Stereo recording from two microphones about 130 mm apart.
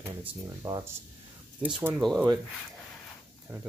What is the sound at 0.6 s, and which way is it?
Speech, 30° right (ahead or behind).